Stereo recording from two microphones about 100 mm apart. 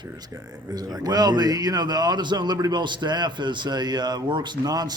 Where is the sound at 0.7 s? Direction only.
40° right (ahead or behind).